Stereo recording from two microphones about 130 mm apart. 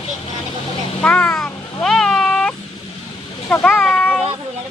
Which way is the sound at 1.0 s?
10° left (ahead or behind).